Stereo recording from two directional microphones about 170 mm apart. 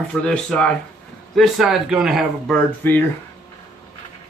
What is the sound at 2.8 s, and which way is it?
Speech, 10° left (ahead or behind).